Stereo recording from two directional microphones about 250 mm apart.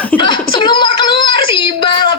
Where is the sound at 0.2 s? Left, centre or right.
Centre.